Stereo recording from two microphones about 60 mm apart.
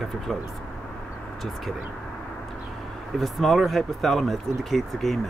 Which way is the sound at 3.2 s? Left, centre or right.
Centre.